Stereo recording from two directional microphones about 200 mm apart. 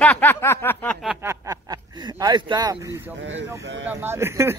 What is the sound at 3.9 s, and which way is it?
Speech, 10° right (ahead or behind).